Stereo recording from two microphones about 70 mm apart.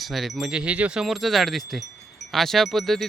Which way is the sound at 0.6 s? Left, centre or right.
Centre.